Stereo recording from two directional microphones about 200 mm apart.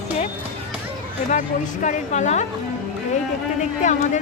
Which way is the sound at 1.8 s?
35° left (ahead or behind).